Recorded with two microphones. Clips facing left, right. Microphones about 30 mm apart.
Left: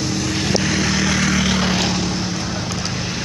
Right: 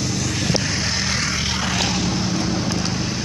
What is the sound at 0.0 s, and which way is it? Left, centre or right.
Vehicle, centre.